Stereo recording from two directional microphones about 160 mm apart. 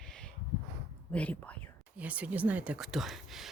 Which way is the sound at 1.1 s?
10° left (ahead or behind).